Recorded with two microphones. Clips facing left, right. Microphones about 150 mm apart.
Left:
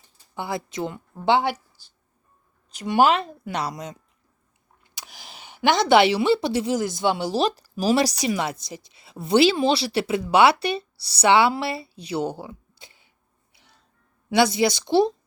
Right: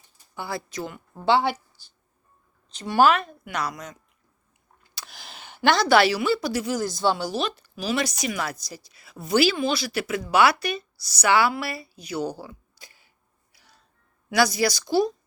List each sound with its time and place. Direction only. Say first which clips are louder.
0.3 s a woman's voice: left 3 dB; 20° left (ahead or behind)
2.6 s a woman's voice: even; 15° left (ahead or behind); by 3.9 s 30° left (ahead or behind)
4.8 s a woman's voice: even; 15° left (ahead or behind)
13.5 s music: even; 20° left (ahead or behind)
14.3 s a woman's voice: left 2 dB; 25° left (ahead or behind)